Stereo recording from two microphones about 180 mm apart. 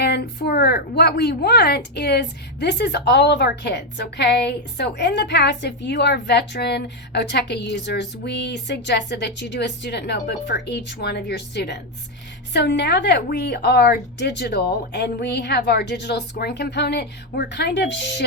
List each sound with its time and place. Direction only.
0.0 s a woman's voice: 65° left (ahead or behind)